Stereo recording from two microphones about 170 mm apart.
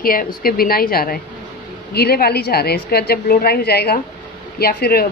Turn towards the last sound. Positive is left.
turn(degrees=65)  # may be behind; listen again after turning